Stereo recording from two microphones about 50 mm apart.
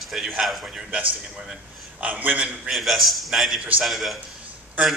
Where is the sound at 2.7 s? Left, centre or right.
Centre.